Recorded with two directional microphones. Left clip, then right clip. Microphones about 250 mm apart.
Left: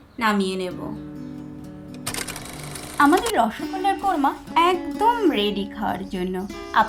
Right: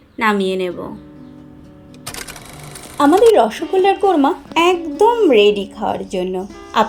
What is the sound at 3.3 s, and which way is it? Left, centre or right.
A woman's voice, left.